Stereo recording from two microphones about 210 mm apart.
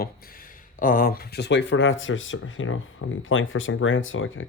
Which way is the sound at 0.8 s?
40° left (ahead or behind).